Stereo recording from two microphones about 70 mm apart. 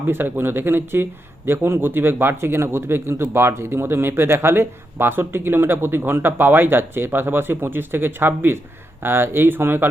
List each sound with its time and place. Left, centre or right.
0.1 s a man's voice: right